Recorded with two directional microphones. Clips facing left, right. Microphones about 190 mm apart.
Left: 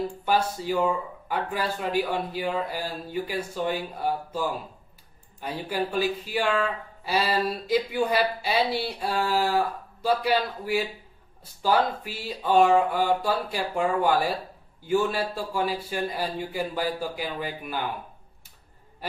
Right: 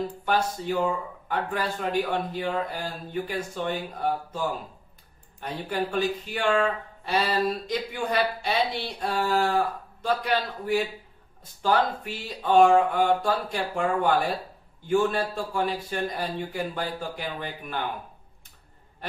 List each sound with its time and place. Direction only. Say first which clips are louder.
0.2 s speech: left 1 dB; 10° left (ahead or behind)
12.0 s speech: left 1 dB; 10° left (ahead or behind)